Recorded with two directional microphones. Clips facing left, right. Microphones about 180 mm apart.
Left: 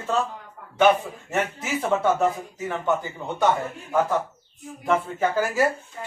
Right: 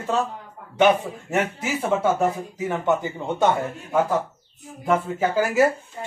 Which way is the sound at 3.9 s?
10° right (ahead or behind).